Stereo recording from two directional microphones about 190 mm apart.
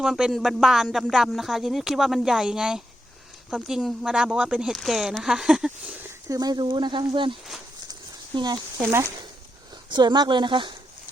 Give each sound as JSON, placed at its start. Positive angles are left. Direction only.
{"t": 0.0, "sound": "speech", "side_deg": -5}
{"t": 6.2, "sound": "speech", "side_deg": -20}
{"t": 8.4, "sound": "speech", "side_deg": -25}